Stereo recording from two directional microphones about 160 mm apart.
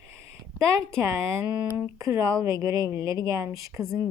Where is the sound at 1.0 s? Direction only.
20° right (ahead or behind).